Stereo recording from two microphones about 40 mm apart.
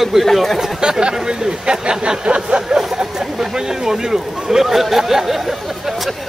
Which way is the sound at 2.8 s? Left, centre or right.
Centre.